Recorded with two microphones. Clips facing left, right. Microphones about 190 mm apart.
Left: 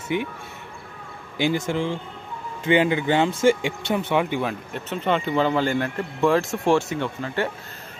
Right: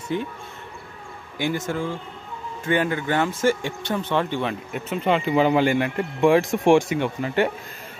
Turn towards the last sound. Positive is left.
turn(degrees=-15)  # may be behind; listen again after turning